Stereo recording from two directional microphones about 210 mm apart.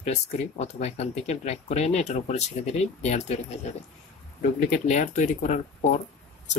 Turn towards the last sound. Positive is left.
turn(degrees=35)  # may be behind; listen again after turning